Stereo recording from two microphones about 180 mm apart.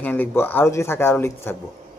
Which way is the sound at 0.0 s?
10° left (ahead or behind).